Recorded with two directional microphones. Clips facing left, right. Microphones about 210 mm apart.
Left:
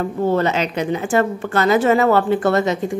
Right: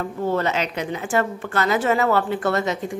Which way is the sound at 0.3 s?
30° left (ahead or behind).